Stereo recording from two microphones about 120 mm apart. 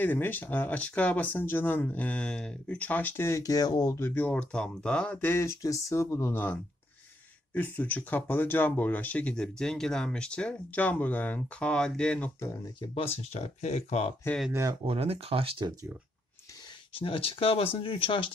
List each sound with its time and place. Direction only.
0.0 s speech: 15° left (ahead or behind); by 4.0 s 30° left (ahead or behind)
4.0 s speech: 15° left (ahead or behind)
12.4 s speech: 25° left (ahead or behind)
12.8 s speech: 55° left (ahead or behind)
14.9 s speech: 55° right (ahead or behind)
16.9 s speech: 50° left (ahead or behind)